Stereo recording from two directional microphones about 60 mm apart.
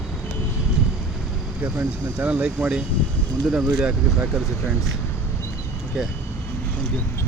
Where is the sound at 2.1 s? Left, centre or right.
Centre.